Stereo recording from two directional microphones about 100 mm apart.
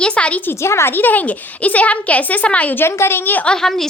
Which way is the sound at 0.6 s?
25° left (ahead or behind).